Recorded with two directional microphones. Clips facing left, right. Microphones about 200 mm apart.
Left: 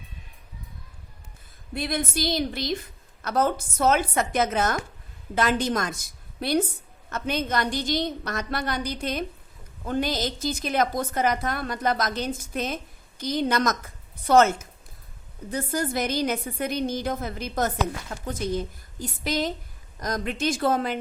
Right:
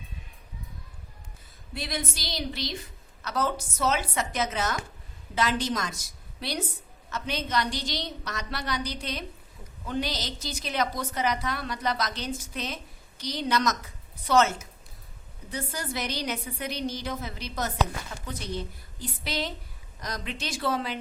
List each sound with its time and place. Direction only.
1.7 s a woman's voice: 55° left (ahead or behind)